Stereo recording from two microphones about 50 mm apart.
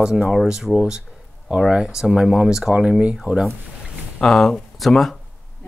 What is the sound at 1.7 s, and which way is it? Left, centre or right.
Speech, centre.